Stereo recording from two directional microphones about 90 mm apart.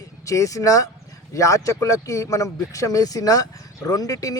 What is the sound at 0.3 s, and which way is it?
A man's voice, 40° left (ahead or behind).